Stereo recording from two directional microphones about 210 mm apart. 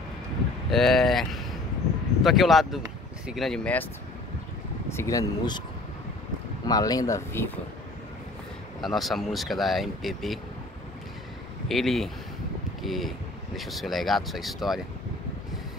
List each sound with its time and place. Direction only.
0.7 s speech: centre (ahead or behind)
4.8 s speech: 15° left (ahead or behind)
6.6 s speech: 20° left (ahead or behind)
8.8 s speech: centre (ahead or behind)
11.7 s speech: centre (ahead or behind)